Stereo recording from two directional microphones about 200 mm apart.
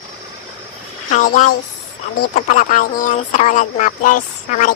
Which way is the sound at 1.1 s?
40° left (ahead or behind).